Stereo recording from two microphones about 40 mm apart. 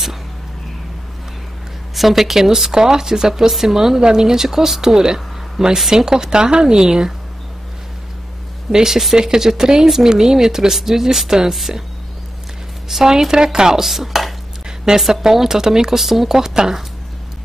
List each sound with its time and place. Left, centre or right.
2.0 s speech: centre
8.7 s speech: centre
12.8 s speech: centre